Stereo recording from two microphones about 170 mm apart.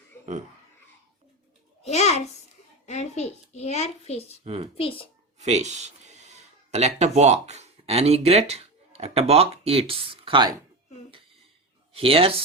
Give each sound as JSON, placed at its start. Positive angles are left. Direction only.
{"t": 1.8, "sound": "a child's voice", "side_deg": 40}
{"t": 4.4, "sound": "speech", "side_deg": -35}
{"t": 4.8, "sound": "a child's voice", "side_deg": 30}
{"t": 5.4, "sound": "speech", "side_deg": -40}
{"t": 11.9, "sound": "speech", "side_deg": -35}